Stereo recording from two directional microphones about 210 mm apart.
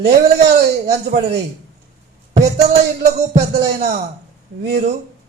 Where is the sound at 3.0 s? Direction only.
30° right (ahead or behind).